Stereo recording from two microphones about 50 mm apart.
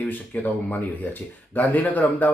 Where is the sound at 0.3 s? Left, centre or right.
Left.